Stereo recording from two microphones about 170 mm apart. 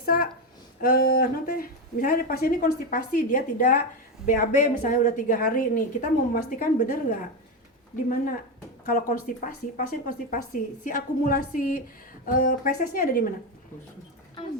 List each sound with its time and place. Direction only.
0.0 s a woman's voice: 60° left (ahead or behind)
8.8 s speech: 55° left (ahead or behind)